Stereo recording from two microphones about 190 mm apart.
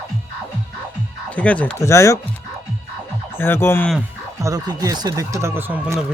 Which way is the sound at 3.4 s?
10° left (ahead or behind).